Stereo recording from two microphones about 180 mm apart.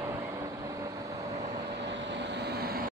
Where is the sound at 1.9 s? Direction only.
80° right; by 2.9 s 55° right (ahead or behind).